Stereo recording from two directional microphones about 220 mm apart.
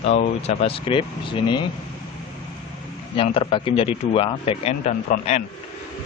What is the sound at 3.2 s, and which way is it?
Speech, 25° left (ahead or behind).